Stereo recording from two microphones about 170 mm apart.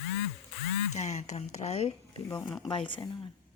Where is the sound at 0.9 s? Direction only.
40° left (ahead or behind).